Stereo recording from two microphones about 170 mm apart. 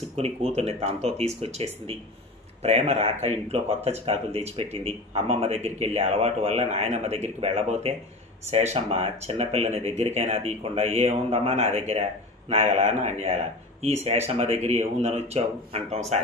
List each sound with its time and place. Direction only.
0.1 s a man's voice: 35° right (ahead or behind)